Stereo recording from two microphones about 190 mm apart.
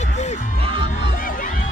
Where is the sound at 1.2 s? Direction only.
45° left (ahead or behind).